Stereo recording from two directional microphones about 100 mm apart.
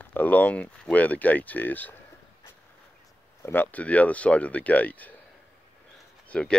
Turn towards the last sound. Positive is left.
turn(degrees=10)  # may be behind; listen again after turning